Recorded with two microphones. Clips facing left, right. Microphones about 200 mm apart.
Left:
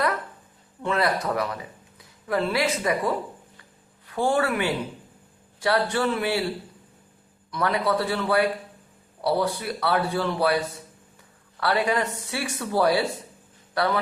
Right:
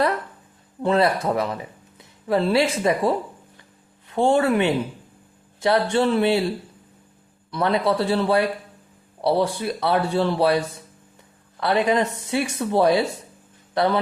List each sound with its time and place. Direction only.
0.8 s speech: 30° right (ahead or behind)
7.5 s speech: 30° right (ahead or behind)
11.6 s speech: 20° right (ahead or behind)